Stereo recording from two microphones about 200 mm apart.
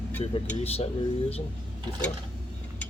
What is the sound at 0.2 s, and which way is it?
Speech, 30° left (ahead or behind).